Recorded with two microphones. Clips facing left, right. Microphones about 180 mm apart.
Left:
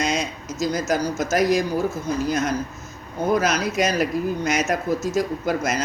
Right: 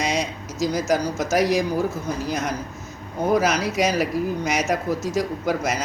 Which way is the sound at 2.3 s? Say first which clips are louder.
Left 3 dB; 10° right (ahead or behind).